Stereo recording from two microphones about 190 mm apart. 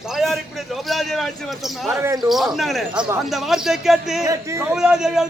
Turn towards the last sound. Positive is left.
turn(degrees=-5)  # may be behind; listen again after turning